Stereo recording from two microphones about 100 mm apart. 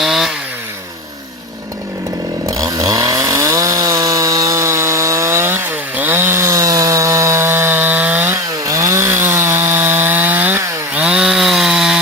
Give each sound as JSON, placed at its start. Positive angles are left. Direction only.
{"t": 0.0, "sound": "chainsaw", "side_deg": 0}
{"t": 2.5, "sound": "chainsaw", "side_deg": -35}
{"t": 8.6, "sound": "chainsaw", "side_deg": -35}